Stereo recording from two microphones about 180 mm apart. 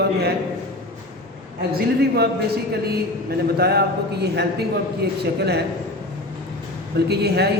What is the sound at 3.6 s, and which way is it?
A man's voice, 60° right (ahead or behind).